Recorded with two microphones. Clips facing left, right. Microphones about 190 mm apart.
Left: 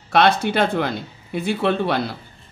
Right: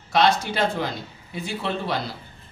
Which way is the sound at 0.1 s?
60° left (ahead or behind).